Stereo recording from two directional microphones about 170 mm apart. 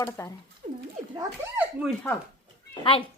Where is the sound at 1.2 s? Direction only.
15° right (ahead or behind).